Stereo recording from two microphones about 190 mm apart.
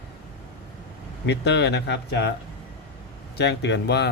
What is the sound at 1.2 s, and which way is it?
Speech, 65° left (ahead or behind).